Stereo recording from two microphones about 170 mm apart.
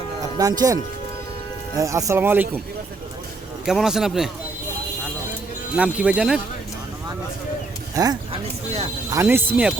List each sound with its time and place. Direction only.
0.3 s speech: 20° right (ahead or behind)
3.7 s speech: 5° right (ahead or behind)
5.7 s speech: 5° right (ahead or behind)
7.9 s speech: 20° right (ahead or behind)